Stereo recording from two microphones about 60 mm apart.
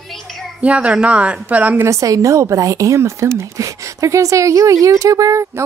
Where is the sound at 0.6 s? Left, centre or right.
Right.